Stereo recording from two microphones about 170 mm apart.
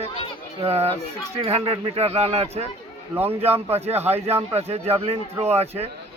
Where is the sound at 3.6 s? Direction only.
40° right (ahead or behind).